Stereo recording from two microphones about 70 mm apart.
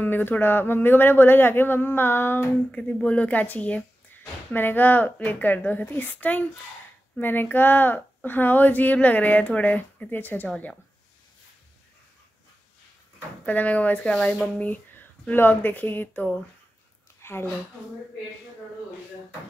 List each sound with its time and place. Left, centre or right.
0.0 s speech: left
2.7 s speech: centre
13.5 s speech: left
14.7 s speech: left
17.2 s a sound: left